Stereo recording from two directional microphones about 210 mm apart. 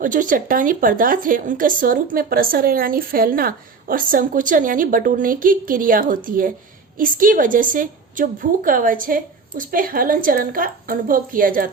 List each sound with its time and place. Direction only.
0.0 s speech: 40° right (ahead or behind)